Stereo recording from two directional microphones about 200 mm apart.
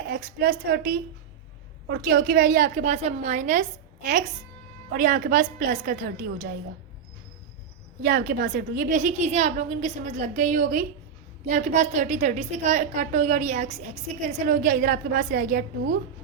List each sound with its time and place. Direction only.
0.1 s a woman's voice: 50° right (ahead or behind)
8.0 s a woman's voice: 45° right (ahead or behind)